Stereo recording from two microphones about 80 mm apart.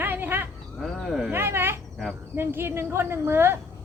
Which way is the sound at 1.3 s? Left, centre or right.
Right.